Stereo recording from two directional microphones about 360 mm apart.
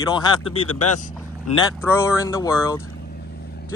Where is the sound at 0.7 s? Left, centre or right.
Left.